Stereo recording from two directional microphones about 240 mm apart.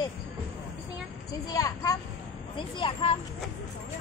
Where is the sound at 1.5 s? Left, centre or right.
Centre.